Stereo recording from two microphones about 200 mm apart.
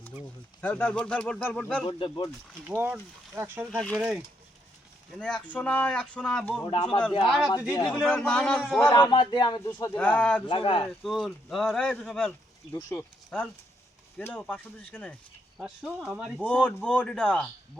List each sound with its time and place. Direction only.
0.6 s speech: 10° left (ahead or behind)
1.9 s speech: 25° left (ahead or behind)
2.6 s speech: 10° right (ahead or behind)
3.7 s speech: 5° left (ahead or behind)
6.6 s speech: 25° left (ahead or behind)
7.3 s speech: centre (ahead or behind)
7.7 s speech: 15° left (ahead or behind)
7.9 s speech: centre (ahead or behind)
8.9 s speech: 25° left (ahead or behind); by 10.4 s 5° left (ahead or behind)
10.4 s speech: 25° left (ahead or behind)
11.0 s speech: centre (ahead or behind)